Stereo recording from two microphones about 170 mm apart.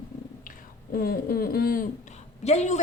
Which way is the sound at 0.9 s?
60° left (ahead or behind).